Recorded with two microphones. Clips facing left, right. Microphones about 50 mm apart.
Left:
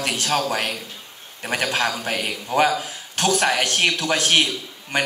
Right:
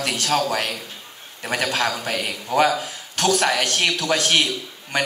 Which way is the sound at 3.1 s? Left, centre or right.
Left.